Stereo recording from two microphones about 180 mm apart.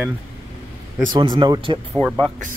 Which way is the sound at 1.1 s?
25° right (ahead or behind).